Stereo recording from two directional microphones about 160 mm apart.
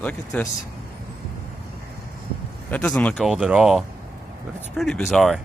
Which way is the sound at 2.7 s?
10° left (ahead or behind).